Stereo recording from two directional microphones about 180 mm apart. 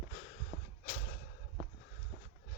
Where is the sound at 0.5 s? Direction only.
30° right (ahead or behind).